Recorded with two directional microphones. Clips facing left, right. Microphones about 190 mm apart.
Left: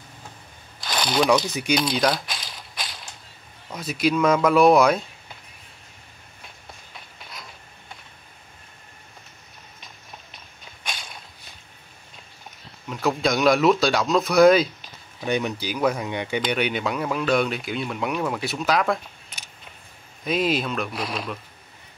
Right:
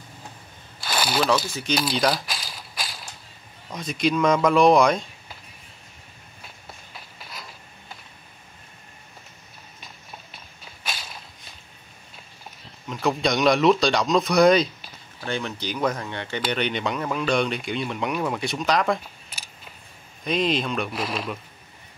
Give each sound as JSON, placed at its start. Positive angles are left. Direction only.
{"t": 0.7, "sound": "a sound", "side_deg": -5}
{"t": 1.5, "sound": "speech", "side_deg": 15}
{"t": 1.8, "sound": "mechanisms", "side_deg": -5}
{"t": 3.7, "sound": "speech", "side_deg": 5}
{"t": 7.2, "sound": "a sound", "side_deg": 0}
{"t": 10.9, "sound": "walk", "side_deg": -5}
{"t": 12.9, "sound": "speech", "side_deg": 5}
{"t": 15.1, "sound": "speech", "side_deg": 15}
{"t": 20.2, "sound": "speech", "side_deg": 5}